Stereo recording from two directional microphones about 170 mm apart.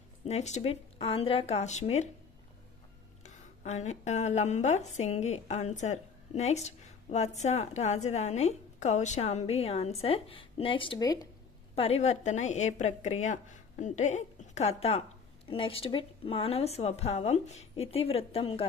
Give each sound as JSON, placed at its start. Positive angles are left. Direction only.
{"t": 0.3, "sound": "a woman's voice", "side_deg": 40}
{"t": 3.2, "sound": "a woman's voice", "side_deg": 40}
{"t": 11.7, "sound": "a woman's voice", "side_deg": 35}